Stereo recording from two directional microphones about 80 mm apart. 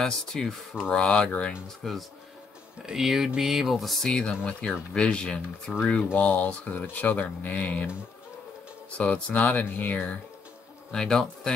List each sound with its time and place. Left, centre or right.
0.0 s speech: centre
1.8 s speech: centre
4.1 s speech: centre
8.9 s speech: centre
10.9 s speech: centre